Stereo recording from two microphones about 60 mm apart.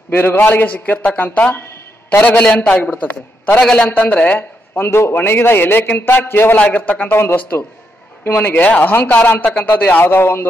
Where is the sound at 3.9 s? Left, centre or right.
Left.